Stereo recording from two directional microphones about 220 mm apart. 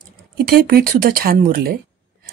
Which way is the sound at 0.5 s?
45° right (ahead or behind).